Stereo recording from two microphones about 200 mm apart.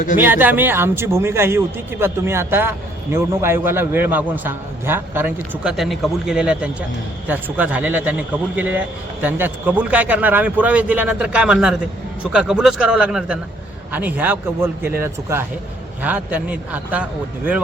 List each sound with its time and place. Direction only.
0.2 s a man's voice: 10° right (ahead or behind)